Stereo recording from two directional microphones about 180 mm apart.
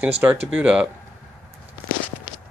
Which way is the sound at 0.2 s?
10° right (ahead or behind).